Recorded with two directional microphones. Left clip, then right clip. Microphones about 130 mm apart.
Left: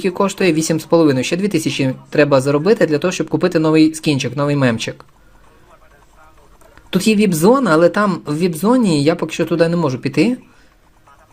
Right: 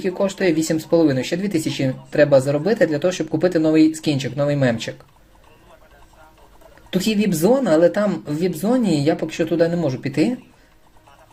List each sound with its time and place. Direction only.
0.0 s speech: 60° left (ahead or behind)
6.9 s speech: 55° left (ahead or behind)